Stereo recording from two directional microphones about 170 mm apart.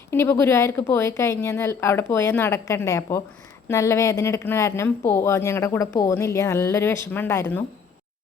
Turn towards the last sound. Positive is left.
turn(degrees=15)  # may be behind; listen again after turning